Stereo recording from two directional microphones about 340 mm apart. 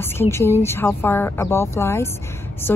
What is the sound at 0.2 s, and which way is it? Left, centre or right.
Speech, centre.